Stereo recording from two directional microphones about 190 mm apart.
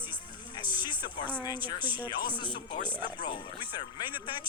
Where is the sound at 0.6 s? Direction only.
25° left (ahead or behind).